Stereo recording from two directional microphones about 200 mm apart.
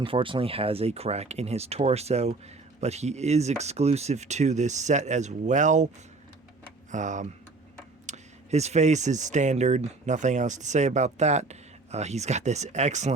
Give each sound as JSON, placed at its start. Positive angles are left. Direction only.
{"t": 0.0, "sound": "speech", "side_deg": -25}
{"t": 6.9, "sound": "speech", "side_deg": -40}